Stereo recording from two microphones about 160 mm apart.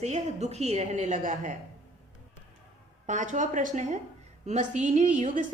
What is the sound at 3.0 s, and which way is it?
A woman's voice, 50° right (ahead or behind).